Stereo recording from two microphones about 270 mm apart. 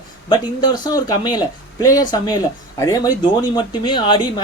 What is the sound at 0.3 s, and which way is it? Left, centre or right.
Speech, centre.